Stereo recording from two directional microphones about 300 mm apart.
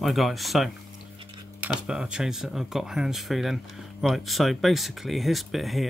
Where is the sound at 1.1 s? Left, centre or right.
Centre.